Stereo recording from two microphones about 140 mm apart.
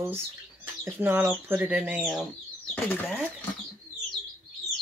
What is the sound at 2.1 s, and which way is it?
Speech, 5° left (ahead or behind).